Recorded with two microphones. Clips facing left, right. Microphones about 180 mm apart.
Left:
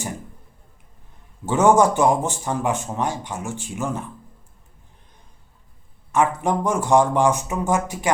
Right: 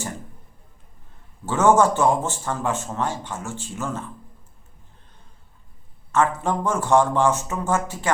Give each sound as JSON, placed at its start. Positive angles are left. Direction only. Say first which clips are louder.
{"t": 1.5, "sound": "speech", "louder": "left 1 dB", "side_deg": 15}
{"t": 6.1, "sound": "speech", "louder": "left 1 dB", "side_deg": 15}